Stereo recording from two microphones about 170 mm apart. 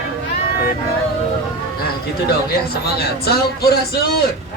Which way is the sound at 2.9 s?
70° left (ahead or behind).